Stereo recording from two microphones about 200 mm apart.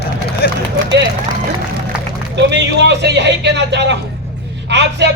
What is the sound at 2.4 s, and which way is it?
A man's voice, 60° right (ahead or behind).